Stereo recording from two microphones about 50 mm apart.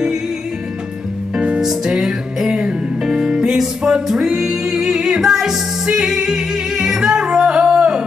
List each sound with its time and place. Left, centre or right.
1.3 s music: right